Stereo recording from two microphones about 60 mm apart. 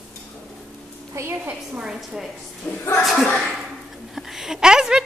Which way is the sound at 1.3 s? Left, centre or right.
Right.